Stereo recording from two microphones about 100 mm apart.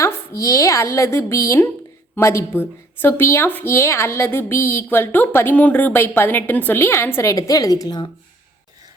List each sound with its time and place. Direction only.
0.0 s a woman's voice: 30° left (ahead or behind)